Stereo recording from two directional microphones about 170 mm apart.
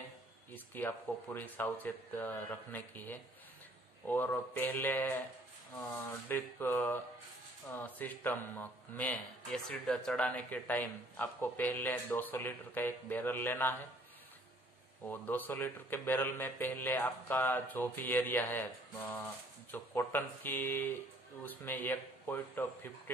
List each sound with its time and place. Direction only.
0.7 s a man's voice: 10° left (ahead or behind)
6.2 s a man's voice: 10° left (ahead or behind)
15.0 s a man's voice: 10° left (ahead or behind)